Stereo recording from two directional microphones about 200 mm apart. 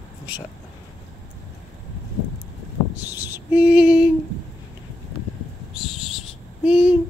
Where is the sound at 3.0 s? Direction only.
10° right (ahead or behind).